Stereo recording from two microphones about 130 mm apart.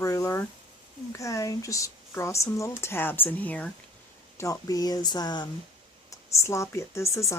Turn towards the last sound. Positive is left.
turn(degrees=20)  # may be behind; listen again after turning